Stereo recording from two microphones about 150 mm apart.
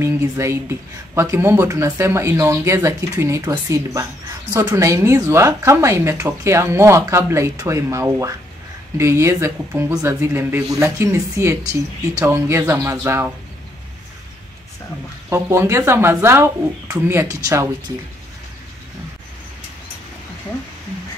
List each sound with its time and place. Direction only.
0.0 s speech: 20° right (ahead or behind)
15.2 s speech: 20° right (ahead or behind)